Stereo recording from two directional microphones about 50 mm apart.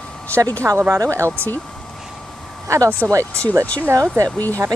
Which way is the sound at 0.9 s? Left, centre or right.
Right.